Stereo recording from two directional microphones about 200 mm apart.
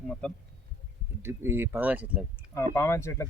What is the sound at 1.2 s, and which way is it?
Speech, 10° right (ahead or behind).